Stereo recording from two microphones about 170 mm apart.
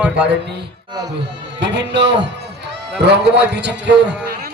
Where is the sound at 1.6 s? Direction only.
90° right.